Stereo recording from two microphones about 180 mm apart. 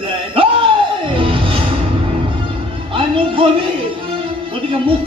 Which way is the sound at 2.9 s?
30° right (ahead or behind).